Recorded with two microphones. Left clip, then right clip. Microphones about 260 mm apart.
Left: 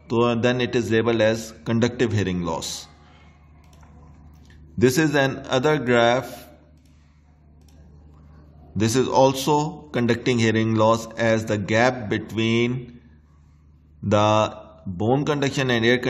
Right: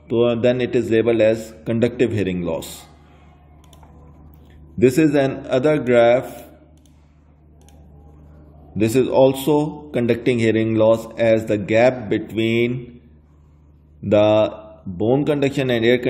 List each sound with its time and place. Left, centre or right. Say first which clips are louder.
0.0 s a man's voice: right 4 dB; centre
4.7 s a man's voice: right 4 dB; centre
8.7 s a man's voice: right 3 dB; centre
14.1 s a man's voice: right 4 dB; centre